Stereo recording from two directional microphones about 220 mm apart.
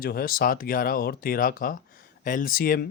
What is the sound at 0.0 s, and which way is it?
Speech, 40° left (ahead or behind).